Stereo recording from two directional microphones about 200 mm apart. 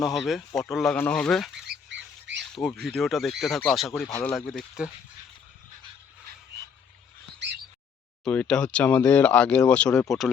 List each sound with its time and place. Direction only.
0.0 s speech: centre (ahead or behind)
1.6 s duck: 60° right (ahead or behind)
2.8 s speech: centre (ahead or behind)
7.3 s squawk: 60° right (ahead or behind)
8.2 s speech: 5° left (ahead or behind)